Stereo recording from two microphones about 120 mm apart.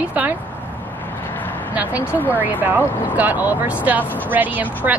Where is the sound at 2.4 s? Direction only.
15° right (ahead or behind).